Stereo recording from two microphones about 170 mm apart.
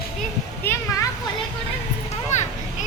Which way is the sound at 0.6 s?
15° left (ahead or behind).